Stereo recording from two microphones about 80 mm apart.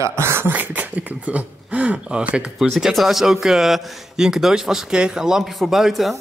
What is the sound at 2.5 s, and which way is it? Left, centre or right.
Speech, centre.